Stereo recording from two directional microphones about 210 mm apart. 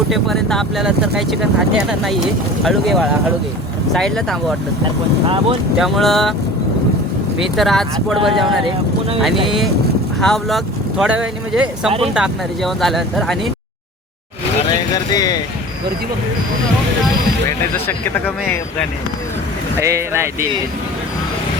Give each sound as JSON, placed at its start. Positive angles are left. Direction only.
{"t": 0.1, "sound": "speech", "side_deg": 0}
{"t": 5.8, "sound": "speech", "side_deg": 0}
{"t": 7.5, "sound": "speech", "side_deg": 0}
{"t": 14.9, "sound": "speech", "side_deg": 15}
{"t": 17.8, "sound": "speech", "side_deg": 10}
{"t": 19.8, "sound": "speech", "side_deg": -15}